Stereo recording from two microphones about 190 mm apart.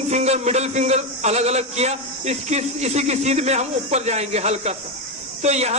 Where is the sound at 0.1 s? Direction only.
35° right (ahead or behind).